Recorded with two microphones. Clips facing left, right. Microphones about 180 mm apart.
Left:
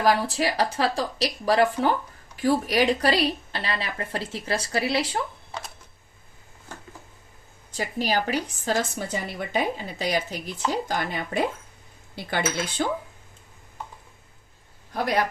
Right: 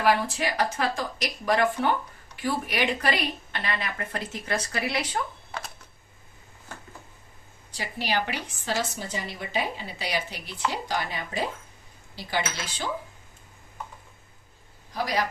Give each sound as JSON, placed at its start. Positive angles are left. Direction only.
{"t": 0.0, "sound": "speech", "side_deg": 35}
{"t": 7.7, "sound": "speech", "side_deg": 45}
{"t": 14.9, "sound": "speech", "side_deg": 55}